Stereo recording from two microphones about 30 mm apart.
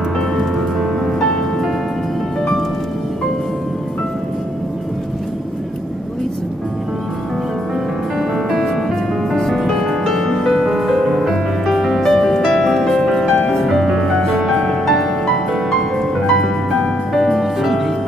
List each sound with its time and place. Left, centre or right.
8.2 s music: centre
9.3 s music: centre
13.7 s music: centre
17.4 s music: centre